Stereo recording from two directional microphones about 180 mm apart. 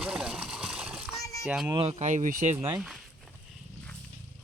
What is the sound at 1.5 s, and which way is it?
Speech, 5° right (ahead or behind).